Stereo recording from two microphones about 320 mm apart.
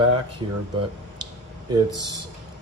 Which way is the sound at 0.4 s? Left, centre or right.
Centre.